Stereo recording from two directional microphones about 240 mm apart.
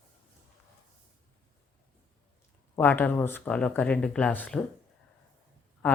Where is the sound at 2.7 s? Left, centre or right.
Centre.